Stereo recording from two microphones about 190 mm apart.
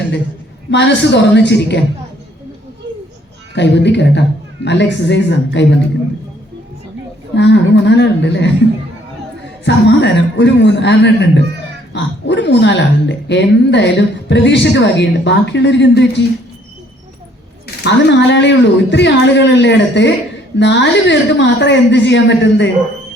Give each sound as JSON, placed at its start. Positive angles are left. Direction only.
{"t": 0.7, "sound": "a woman's voice", "side_deg": 65}
{"t": 3.5, "sound": "a woman's voice", "side_deg": 65}
{"t": 7.3, "sound": "a woman's voice", "side_deg": 70}
{"t": 9.6, "sound": "a woman's voice", "side_deg": 65}
{"t": 17.8, "sound": "a woman's voice", "side_deg": 65}